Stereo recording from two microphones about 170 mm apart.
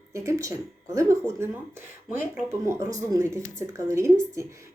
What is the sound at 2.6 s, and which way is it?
A woman's voice, 20° right (ahead or behind).